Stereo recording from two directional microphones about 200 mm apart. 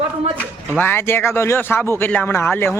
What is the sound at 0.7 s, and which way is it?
Speech, 10° left (ahead or behind).